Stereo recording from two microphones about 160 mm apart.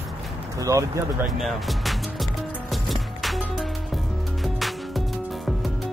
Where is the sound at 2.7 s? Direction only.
Centre (ahead or behind).